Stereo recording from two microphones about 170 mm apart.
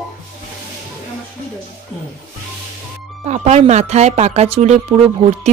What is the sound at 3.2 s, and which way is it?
Speech, 40° right (ahead or behind).